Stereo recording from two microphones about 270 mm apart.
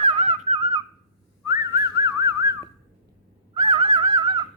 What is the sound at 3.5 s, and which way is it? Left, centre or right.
Dog, centre.